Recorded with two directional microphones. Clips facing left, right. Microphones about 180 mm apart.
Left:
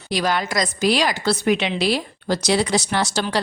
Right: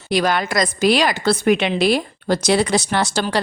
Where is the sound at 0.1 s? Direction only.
55° right (ahead or behind).